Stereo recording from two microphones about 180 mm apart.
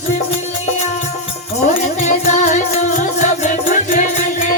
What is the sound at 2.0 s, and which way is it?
Music, 40° left (ahead or behind).